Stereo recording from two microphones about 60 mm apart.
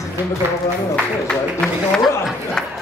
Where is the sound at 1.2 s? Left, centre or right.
Centre.